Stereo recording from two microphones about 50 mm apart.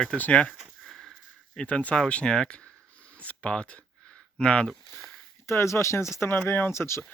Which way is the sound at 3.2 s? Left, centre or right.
Left.